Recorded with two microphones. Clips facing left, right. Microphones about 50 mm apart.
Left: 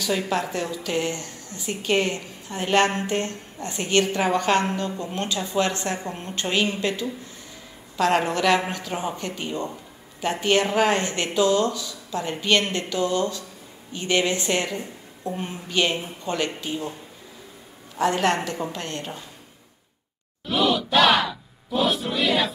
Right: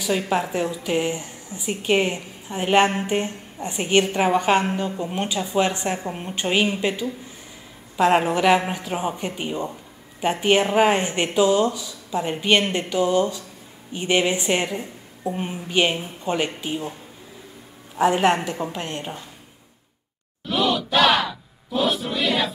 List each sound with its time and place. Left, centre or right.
0.0 s speech: centre
17.9 s speech: centre
20.4 s battle cry: centre